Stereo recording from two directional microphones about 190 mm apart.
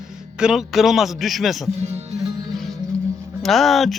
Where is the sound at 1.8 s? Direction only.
35° right (ahead or behind).